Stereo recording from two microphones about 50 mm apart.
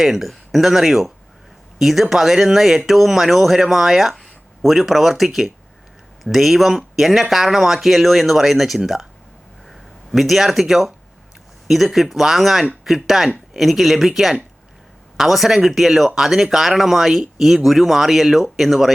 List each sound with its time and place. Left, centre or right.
0.0 s speech: centre